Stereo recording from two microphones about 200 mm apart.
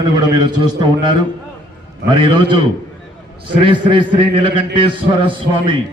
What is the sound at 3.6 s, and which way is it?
Speech, 25° right (ahead or behind).